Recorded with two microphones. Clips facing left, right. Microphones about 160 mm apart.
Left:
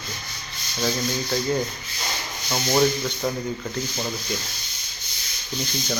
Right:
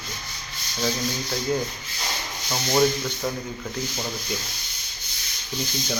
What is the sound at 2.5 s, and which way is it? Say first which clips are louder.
Speech: left 1 dB; 5° left (ahead or behind).